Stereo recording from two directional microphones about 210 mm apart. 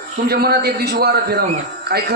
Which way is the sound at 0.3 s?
50° right (ahead or behind).